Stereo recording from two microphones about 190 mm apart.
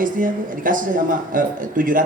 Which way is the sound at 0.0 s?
45° right (ahead or behind).